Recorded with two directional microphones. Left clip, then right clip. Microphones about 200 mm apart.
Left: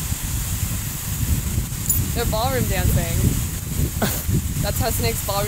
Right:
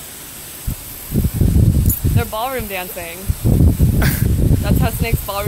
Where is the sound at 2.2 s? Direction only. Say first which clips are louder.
Right 1 dB; 5° left (ahead or behind).